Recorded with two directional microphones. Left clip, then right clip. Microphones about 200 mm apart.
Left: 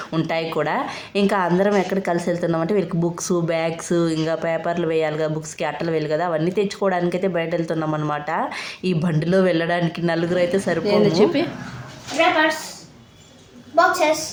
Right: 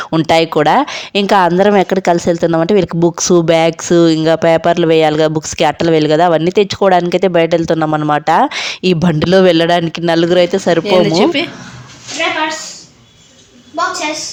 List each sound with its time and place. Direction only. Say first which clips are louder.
0.0 s a sound: right 10 dB; 35° right (ahead or behind)
0.3 s a woman's voice: right 13 dB; 50° right (ahead or behind)
11.0 s speech: right 5 dB; centre (ahead or behind)